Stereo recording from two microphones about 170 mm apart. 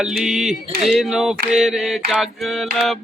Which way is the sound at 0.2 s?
5° right (ahead or behind).